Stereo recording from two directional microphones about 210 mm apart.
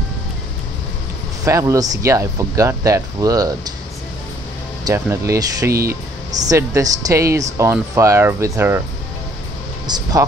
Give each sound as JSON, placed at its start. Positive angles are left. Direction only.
{"t": 1.4, "sound": "speech", "side_deg": -15}
{"t": 4.8, "sound": "speech", "side_deg": -15}
{"t": 9.8, "sound": "speech", "side_deg": -20}